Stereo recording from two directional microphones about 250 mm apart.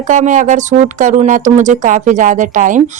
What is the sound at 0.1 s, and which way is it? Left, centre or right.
Speech, right.